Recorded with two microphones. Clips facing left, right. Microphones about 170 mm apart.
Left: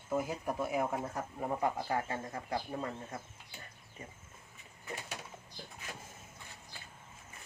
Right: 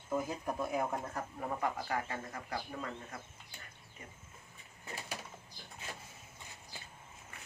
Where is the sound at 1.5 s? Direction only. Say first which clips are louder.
Left 3 dB; 25° left (ahead or behind).